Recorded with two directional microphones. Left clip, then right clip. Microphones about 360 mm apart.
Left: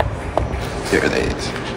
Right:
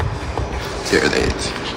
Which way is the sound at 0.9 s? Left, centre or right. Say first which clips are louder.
Right 1 dB; centre.